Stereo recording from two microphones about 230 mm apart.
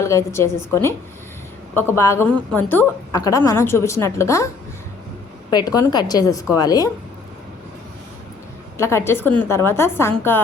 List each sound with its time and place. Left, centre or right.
0.0 s a woman's voice: centre
5.5 s a woman's voice: centre
8.8 s a woman's voice: centre